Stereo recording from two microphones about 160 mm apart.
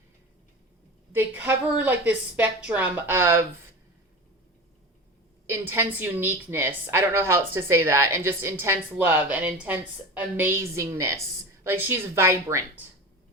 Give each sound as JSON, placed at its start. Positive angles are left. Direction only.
{"t": 1.1, "sound": "a woman's voice", "side_deg": -10}
{"t": 5.5, "sound": "a woman's voice", "side_deg": -15}